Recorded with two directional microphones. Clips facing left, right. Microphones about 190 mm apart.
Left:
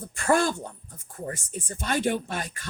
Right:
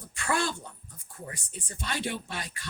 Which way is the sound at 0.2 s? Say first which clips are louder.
Left 7 dB; 50° left (ahead or behind).